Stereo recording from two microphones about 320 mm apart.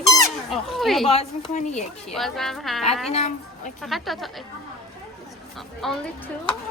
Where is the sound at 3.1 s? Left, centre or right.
Left.